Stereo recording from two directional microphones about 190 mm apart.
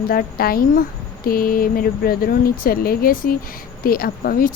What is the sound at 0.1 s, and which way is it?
Speech, 50° left (ahead or behind).